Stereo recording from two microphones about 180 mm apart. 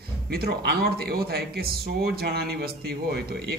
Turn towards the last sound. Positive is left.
turn(degrees=-60)  # may be behind; listen again after turning